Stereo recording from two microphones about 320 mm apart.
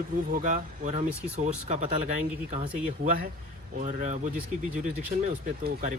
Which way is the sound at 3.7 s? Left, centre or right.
Right.